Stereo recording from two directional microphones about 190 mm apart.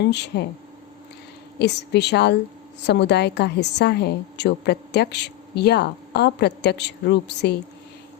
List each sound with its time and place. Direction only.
0.0 s a woman's voice: 65° left (ahead or behind)
1.5 s a woman's voice: 60° left (ahead or behind)